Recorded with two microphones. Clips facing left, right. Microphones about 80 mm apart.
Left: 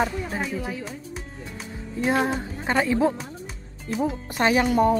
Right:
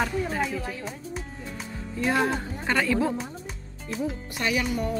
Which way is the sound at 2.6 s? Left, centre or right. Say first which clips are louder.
Left 3 dB; left.